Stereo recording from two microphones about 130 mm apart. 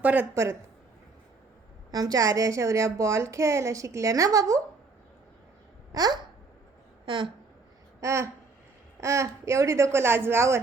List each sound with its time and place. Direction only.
0.0 s speech: 10° right (ahead or behind)
1.9 s a woman's voice: 30° right (ahead or behind)
5.9 s babbling: 30° right (ahead or behind)
7.0 s speech: 40° right (ahead or behind)
8.0 s a woman's voice: 20° right (ahead or behind)